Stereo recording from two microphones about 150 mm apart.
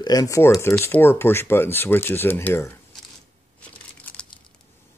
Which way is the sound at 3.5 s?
10° left (ahead or behind).